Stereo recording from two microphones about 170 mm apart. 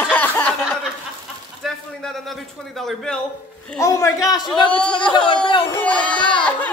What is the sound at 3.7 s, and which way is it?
A woman's voice, 15° left (ahead or behind).